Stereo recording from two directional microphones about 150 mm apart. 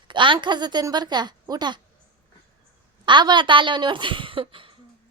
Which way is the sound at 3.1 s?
30° right (ahead or behind).